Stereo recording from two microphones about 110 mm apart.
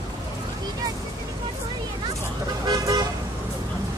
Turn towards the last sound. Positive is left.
turn(degrees=-35)  # may be behind; listen again after turning